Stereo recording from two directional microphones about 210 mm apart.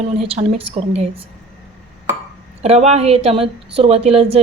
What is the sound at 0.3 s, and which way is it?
Speech, 30° right (ahead or behind).